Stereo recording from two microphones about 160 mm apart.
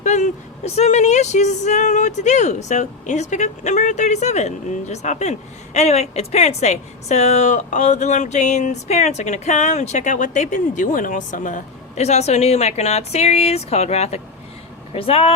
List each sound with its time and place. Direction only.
0.0 s speech: 45° left (ahead or behind)